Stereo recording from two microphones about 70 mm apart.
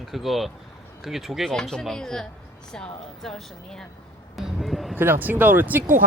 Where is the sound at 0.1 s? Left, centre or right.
Centre.